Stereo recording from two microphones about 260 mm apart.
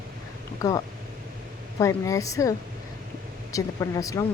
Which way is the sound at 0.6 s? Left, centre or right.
Centre.